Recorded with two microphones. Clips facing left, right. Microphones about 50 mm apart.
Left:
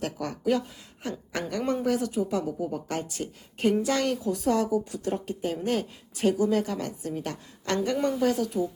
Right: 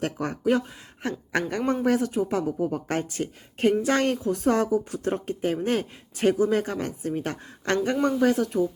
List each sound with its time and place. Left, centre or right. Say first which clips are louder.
0.0 s a woman's voice: right 3 dB; right
1.0 s a woman's voice: right 5 dB; right